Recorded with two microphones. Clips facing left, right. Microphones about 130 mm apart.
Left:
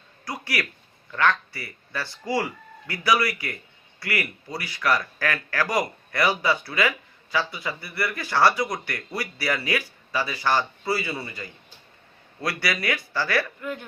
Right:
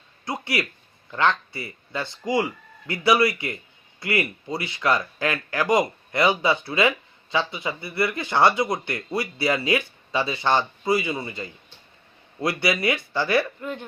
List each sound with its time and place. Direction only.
0.3 s a man's voice: 25° right (ahead or behind)